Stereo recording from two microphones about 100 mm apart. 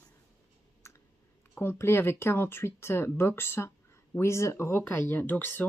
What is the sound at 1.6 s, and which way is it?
Speech, 25° left (ahead or behind).